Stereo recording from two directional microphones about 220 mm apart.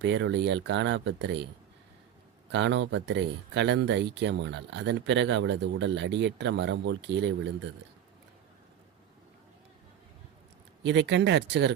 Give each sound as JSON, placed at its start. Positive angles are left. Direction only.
{"t": 0.0, "sound": "speech", "side_deg": -55}
{"t": 2.5, "sound": "speech", "side_deg": -55}
{"t": 10.8, "sound": "speech", "side_deg": -50}